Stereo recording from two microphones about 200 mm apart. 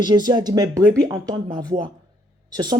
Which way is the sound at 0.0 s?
20° right (ahead or behind).